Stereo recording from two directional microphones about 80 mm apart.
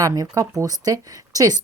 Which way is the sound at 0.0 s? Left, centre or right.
Right.